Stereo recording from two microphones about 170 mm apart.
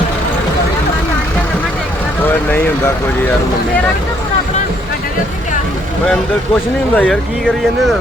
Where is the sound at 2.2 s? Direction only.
10° left (ahead or behind).